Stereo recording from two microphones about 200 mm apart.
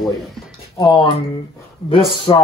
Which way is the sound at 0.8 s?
20° left (ahead or behind).